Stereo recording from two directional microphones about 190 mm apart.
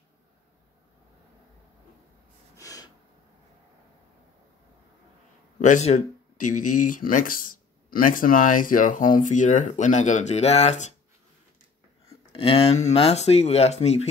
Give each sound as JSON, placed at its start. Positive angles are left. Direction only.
{"t": 2.5, "sound": "snort", "side_deg": 20}
{"t": 5.6, "sound": "speech", "side_deg": 35}
{"t": 12.3, "sound": "speech", "side_deg": 30}